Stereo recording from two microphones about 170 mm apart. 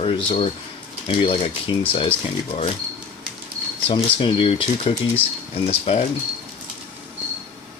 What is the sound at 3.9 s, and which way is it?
Speech, 30° left (ahead or behind).